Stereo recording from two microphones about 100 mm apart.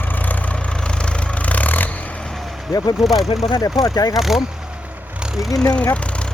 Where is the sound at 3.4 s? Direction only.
50° left (ahead or behind).